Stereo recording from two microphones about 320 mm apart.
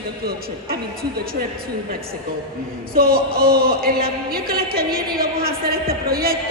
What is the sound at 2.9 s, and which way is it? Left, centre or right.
A woman's voice, right.